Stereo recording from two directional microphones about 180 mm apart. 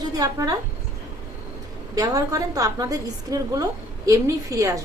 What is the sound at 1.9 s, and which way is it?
A woman's voice, 20° right (ahead or behind).